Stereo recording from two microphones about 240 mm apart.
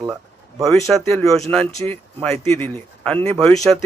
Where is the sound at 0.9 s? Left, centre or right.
Centre.